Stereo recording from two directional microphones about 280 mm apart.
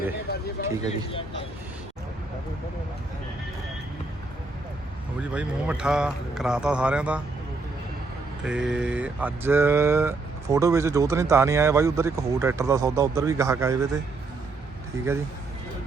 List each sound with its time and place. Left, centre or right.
0.6 s speech: left
5.3 s speech: centre
8.4 s speech: centre